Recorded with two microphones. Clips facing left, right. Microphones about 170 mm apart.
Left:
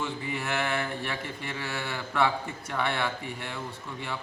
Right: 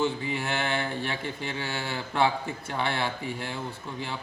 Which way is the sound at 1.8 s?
30° right (ahead or behind).